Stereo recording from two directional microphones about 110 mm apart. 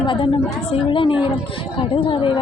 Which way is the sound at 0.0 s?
45° left (ahead or behind).